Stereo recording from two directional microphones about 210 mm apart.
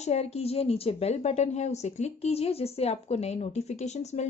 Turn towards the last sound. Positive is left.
turn(degrees=35)  # may be behind; listen again after turning